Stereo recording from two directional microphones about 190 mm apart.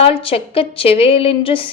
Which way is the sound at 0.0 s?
30° left (ahead or behind).